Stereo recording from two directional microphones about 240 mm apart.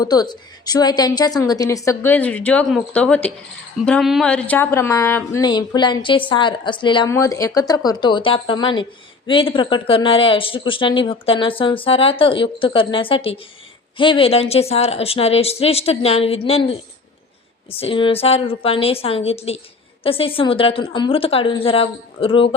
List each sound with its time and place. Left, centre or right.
0.0 s a woman's voice: centre